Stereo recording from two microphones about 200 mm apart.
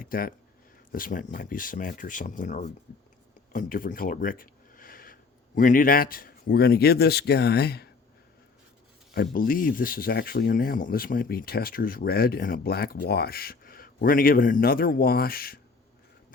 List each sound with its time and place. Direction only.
0.0 s speech: 45° left (ahead or behind)
3.5 s a sound: 45° left (ahead or behind)
5.5 s speech: 45° left (ahead or behind)
9.1 s speech: 50° left (ahead or behind)